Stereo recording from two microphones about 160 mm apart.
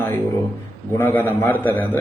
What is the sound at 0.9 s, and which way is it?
Speech, 15° left (ahead or behind).